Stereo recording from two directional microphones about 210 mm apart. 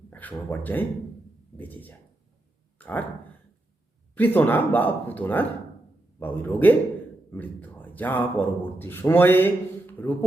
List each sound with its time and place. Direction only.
0.1 s a man's voice: 10° left (ahead or behind)
2.7 s a sound: 10° left (ahead or behind)
4.1 s a man's voice: 10° left (ahead or behind)